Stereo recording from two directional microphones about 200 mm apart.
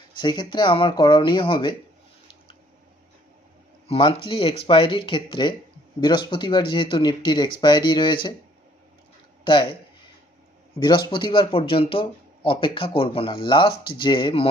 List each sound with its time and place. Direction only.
0.2 s speech: 20° left (ahead or behind)
3.8 s speech: 25° left (ahead or behind)
9.4 s speech: 25° left (ahead or behind)
10.8 s speech: 20° left (ahead or behind)